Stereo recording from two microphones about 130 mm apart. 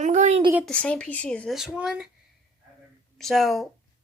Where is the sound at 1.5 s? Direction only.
5° right (ahead or behind).